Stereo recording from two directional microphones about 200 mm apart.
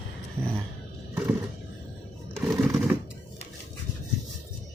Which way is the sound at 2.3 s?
10° right (ahead or behind).